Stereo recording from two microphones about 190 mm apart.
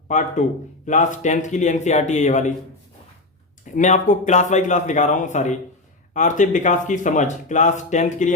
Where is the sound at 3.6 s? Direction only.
40° left (ahead or behind).